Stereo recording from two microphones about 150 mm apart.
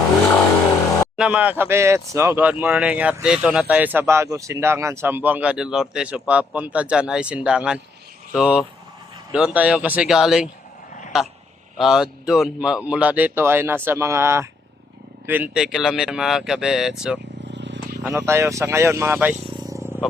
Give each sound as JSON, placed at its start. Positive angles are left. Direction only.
{"t": 1.1, "sound": "speech", "side_deg": -5}
{"t": 11.8, "sound": "speech", "side_deg": -5}
{"t": 18.0, "sound": "speech", "side_deg": -15}